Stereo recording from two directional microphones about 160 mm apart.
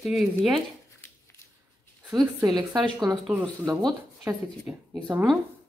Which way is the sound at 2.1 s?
25° right (ahead or behind).